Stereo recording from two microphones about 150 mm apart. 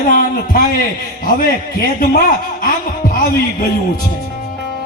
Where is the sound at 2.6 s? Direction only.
70° left (ahead or behind).